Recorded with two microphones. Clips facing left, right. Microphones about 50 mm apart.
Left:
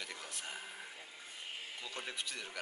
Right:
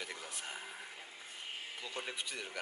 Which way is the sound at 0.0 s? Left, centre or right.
Centre.